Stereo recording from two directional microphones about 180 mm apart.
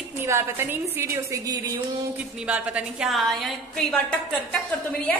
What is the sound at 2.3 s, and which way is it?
A woman's voice, 5° right (ahead or behind).